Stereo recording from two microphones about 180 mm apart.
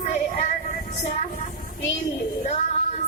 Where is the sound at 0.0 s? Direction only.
40° left (ahead or behind).